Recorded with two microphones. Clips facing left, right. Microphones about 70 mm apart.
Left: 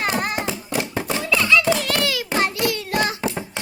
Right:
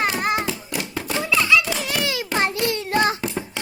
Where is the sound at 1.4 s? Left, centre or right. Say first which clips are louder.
Even; centre.